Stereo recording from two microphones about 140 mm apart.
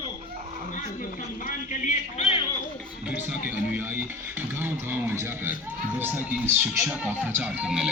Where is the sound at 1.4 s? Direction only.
65° left (ahead or behind).